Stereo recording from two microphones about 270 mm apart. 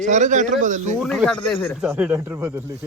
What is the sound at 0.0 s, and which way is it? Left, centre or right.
Speech, right.